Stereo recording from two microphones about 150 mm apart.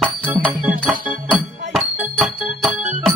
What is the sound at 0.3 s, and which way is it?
Music, 10° right (ahead or behind).